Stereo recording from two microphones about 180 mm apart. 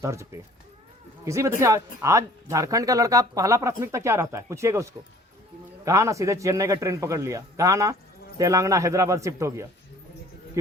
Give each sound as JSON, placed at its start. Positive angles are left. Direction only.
{"t": 0.0, "sound": "speech", "side_deg": -15}